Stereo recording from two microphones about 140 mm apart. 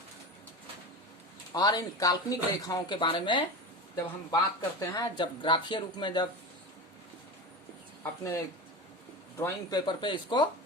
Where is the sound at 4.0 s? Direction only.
25° left (ahead or behind).